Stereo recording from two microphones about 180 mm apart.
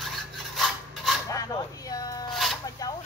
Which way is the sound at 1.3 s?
20° left (ahead or behind).